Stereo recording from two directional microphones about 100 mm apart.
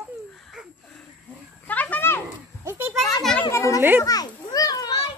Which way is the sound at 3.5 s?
30° left (ahead or behind).